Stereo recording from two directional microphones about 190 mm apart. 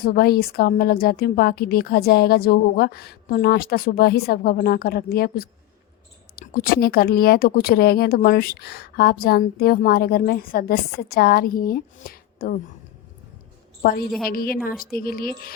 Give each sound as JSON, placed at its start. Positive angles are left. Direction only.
{"t": 0.0, "sound": "speech", "side_deg": 55}
{"t": 14.3, "sound": "speech", "side_deg": 50}